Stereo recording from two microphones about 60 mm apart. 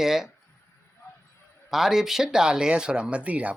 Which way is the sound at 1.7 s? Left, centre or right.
Centre.